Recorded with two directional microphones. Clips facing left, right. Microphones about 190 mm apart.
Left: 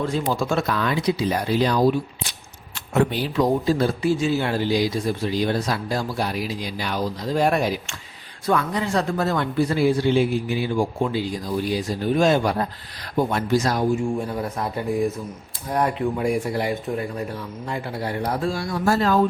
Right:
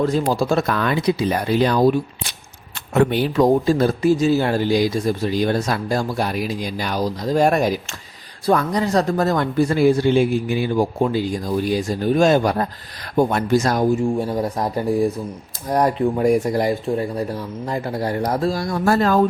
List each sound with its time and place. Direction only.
0.0 s speech: 40° right (ahead or behind)
0.7 s speech: 55° right (ahead or behind)
2.9 s speech: 60° right (ahead or behind)